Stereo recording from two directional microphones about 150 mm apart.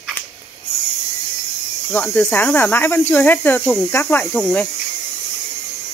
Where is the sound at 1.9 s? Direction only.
10° left (ahead or behind).